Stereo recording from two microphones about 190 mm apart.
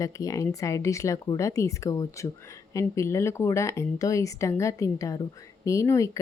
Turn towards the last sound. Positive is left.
turn(degrees=15)  # may be behind; listen again after turning